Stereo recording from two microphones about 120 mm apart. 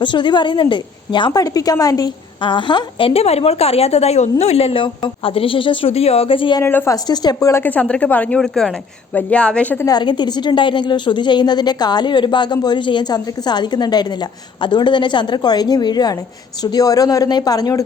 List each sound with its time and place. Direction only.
0.0 s a woman's voice: 40° left (ahead or behind)
3.1 s a woman's voice: 60° left (ahead or behind)
6.6 s speech: 20° left (ahead or behind)
6.9 s a woman's voice: 35° left (ahead or behind)
7.6 s a woman's voice: 10° left (ahead or behind)
9.8 s a woman's voice: 35° left (ahead or behind)